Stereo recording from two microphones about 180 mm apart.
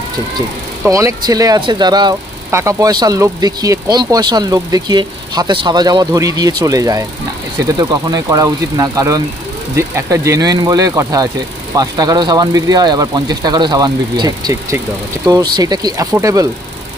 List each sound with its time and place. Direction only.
0.8 s speech: 20° right (ahead or behind)